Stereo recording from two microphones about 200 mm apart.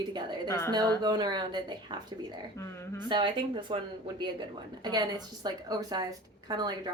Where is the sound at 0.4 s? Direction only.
15° left (ahead or behind).